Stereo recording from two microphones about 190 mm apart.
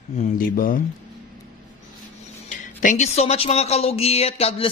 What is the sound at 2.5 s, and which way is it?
Speech, 40° left (ahead or behind).